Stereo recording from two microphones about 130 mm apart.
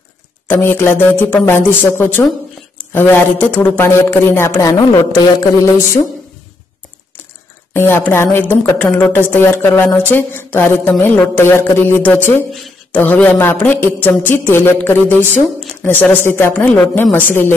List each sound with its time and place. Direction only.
0.5 s speech: 15° left (ahead or behind)
7.7 s speech: 15° left (ahead or behind)